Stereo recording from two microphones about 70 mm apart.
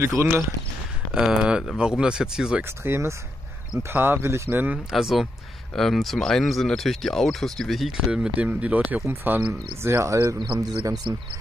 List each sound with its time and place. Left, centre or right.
0.0 s speech: right
1.1 s speech: centre
2.8 s speech: right
4.9 s speech: centre
8.1 s speech: centre
9.0 s speech: right
10.6 s speech: right